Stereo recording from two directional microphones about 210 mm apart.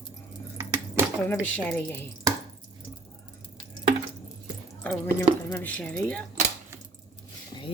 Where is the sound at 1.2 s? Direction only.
5° left (ahead or behind).